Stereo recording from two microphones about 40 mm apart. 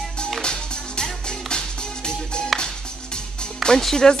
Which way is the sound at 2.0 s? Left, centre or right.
Centre.